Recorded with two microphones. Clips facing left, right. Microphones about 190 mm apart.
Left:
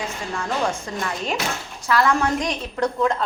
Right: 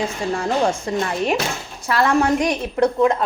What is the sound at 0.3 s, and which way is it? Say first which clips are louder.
A woman's voice: right 4 dB; 30° right (ahead or behind).